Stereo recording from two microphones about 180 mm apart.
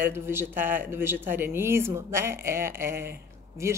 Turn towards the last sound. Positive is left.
turn(degrees=-15)  # may be behind; listen again after turning